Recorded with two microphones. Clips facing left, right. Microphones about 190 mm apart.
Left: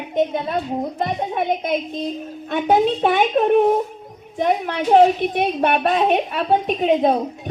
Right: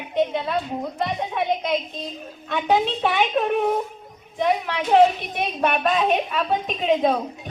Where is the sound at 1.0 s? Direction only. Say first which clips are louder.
Left 1 dB; 50° left (ahead or behind).